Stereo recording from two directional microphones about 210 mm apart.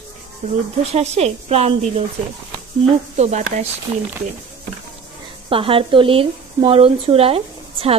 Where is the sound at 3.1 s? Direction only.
35° right (ahead or behind).